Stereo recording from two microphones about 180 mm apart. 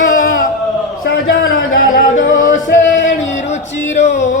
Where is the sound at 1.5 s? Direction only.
50° left (ahead or behind).